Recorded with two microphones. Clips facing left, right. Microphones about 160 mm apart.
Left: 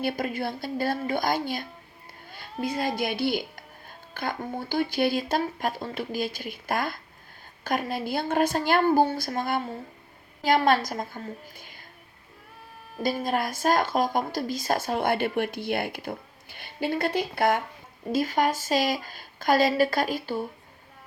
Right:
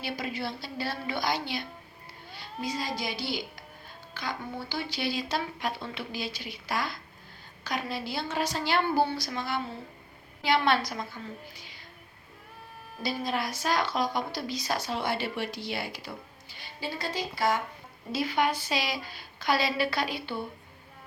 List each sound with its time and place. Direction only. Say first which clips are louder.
0.0 s speech: left 6 dB; 50° left (ahead or behind)
13.0 s speech: left 5 dB; 50° left (ahead or behind)
18.1 s speech: left 3 dB; 45° left (ahead or behind)